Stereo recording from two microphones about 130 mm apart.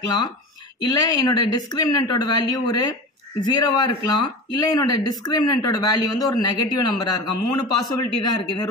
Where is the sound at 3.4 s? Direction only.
35° left (ahead or behind).